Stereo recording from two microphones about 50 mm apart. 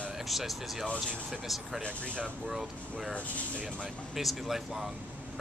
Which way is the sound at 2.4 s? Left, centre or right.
Centre.